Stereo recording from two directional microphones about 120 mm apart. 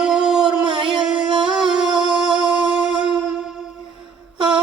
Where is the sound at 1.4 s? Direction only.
5° right (ahead or behind).